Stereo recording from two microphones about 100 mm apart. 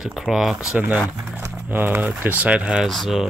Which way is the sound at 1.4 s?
20° right (ahead or behind).